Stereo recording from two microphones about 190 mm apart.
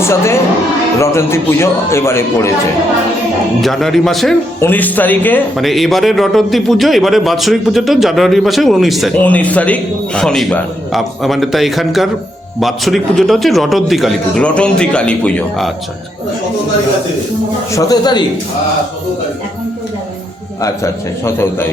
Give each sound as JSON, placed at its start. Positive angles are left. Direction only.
{"t": 0.0, "sound": "a man's voice", "side_deg": 15}
{"t": 3.6, "sound": "speech", "side_deg": 0}
{"t": 17.7, "sound": "speech", "side_deg": 20}
{"t": 20.6, "sound": "a man's voice", "side_deg": 15}